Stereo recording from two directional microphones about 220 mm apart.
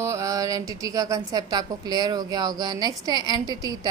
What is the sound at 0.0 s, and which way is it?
A woman's voice, 15° right (ahead or behind).